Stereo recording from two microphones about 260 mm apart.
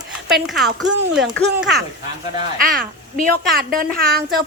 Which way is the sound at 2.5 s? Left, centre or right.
Right.